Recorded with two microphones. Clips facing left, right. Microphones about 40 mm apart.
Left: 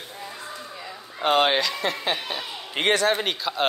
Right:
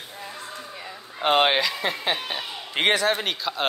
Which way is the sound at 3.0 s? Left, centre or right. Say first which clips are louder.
Left 1 dB; centre.